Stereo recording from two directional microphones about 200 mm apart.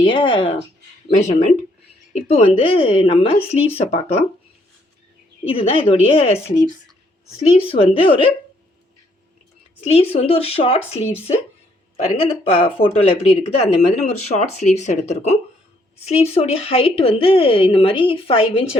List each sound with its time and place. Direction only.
0.0 s speech: 25° left (ahead or behind)
1.1 s speech: 35° left (ahead or behind)
5.5 s speech: 30° left (ahead or behind)
9.8 s speech: 30° left (ahead or behind)
12.2 s speech: 30° left (ahead or behind)